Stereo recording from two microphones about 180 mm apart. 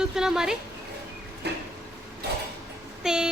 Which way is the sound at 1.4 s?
65° right (ahead or behind).